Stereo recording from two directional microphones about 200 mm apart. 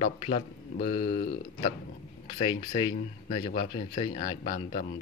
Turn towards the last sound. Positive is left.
turn(degrees=40)  # may be behind; listen again after turning